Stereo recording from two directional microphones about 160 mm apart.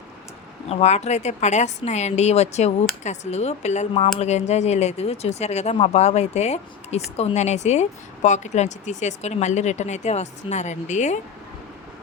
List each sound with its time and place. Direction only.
0.7 s speech: 45° left (ahead or behind)